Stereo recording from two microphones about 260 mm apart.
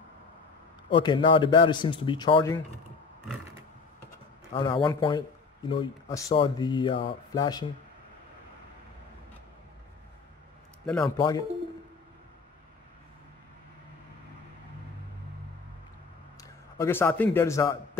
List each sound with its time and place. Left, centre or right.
0.8 s speech: centre
4.6 s speech: centre
11.1 s speech: centre
16.3 s a man's voice: centre